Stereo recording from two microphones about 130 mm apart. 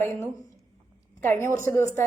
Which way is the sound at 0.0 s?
15° left (ahead or behind).